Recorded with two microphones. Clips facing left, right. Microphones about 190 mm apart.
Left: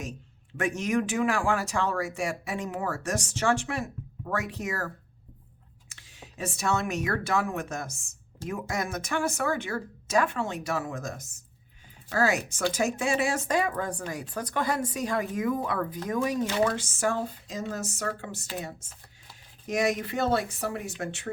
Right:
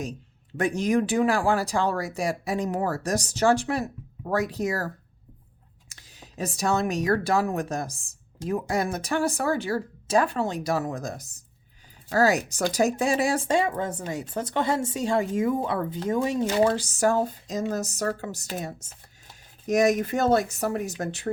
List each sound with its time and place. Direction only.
0.5 s speech: 35° right (ahead or behind)
5.9 s speech: 40° right (ahead or behind)